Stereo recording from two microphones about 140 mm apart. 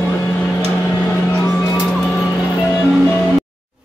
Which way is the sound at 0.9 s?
10° left (ahead or behind).